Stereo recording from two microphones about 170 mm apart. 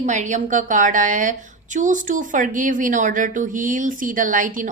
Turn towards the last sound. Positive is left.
turn(degrees=-50)  # may be behind; listen again after turning